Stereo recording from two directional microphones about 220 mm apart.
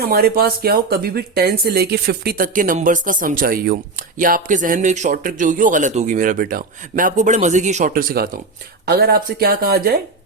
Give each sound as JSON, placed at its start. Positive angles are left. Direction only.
{"t": 0.0, "sound": "speech", "side_deg": -45}